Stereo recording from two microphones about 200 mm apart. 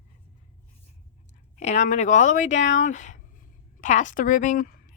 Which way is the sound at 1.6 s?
35° left (ahead or behind).